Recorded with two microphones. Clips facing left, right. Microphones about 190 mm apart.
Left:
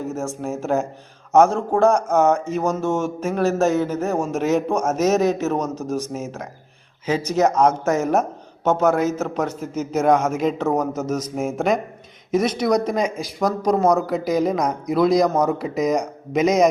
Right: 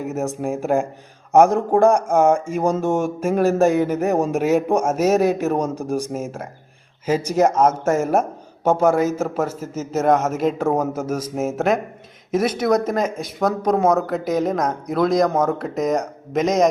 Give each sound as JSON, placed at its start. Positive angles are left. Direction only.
{"t": 0.0, "sound": "speech", "side_deg": -15}
{"t": 7.3, "sound": "speech", "side_deg": -10}